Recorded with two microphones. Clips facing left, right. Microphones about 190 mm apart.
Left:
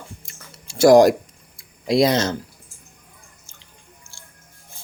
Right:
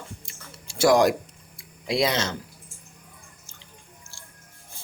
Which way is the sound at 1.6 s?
40° left (ahead or behind).